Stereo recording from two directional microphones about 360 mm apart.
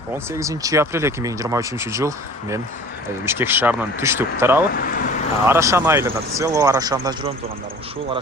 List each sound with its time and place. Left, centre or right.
0.1 s speech: centre
4.7 s speech: left
5.5 s speech: centre